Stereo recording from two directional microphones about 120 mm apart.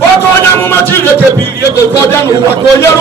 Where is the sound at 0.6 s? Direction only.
20° left (ahead or behind).